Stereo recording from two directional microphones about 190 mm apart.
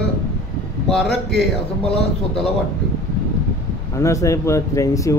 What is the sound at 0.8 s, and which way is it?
Speech, 5° left (ahead or behind).